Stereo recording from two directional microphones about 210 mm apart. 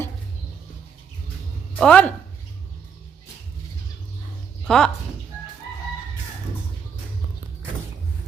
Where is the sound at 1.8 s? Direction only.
5° left (ahead or behind).